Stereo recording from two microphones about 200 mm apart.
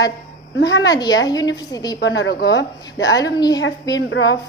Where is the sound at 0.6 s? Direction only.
65° left (ahead or behind).